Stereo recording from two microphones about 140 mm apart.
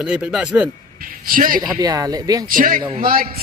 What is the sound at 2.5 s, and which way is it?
Speech, 75° right (ahead or behind).